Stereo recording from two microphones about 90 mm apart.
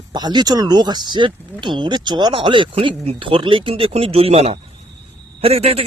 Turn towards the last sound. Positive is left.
turn(degrees=-90)